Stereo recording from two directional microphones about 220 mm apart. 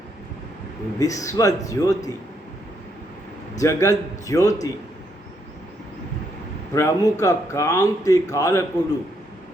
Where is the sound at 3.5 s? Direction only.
15° left (ahead or behind).